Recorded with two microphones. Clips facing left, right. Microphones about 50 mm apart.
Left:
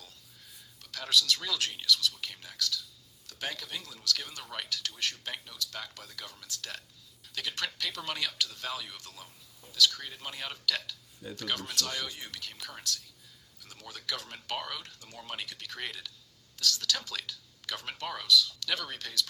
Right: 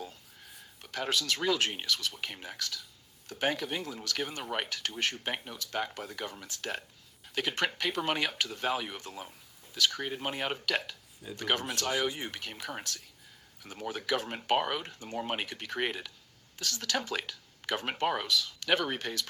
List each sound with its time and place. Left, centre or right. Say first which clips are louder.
0.0 s speech: right 9 dB; right